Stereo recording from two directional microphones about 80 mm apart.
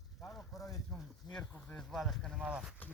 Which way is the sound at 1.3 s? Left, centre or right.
Centre.